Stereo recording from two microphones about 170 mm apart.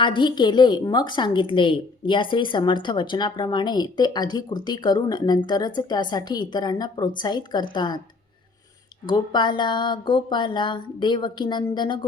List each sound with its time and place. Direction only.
0.0 s a woman's voice: 25° left (ahead or behind)
9.0 s a woman's voice: 25° left (ahead or behind)